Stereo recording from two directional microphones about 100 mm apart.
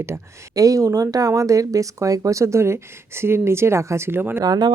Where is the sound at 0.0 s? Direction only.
30° right (ahead or behind).